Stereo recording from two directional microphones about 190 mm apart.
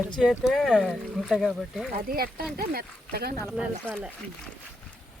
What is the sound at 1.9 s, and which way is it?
Speech, 50° right (ahead or behind).